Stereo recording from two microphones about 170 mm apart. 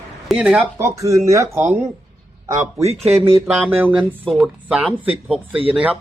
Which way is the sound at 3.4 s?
5° right (ahead or behind).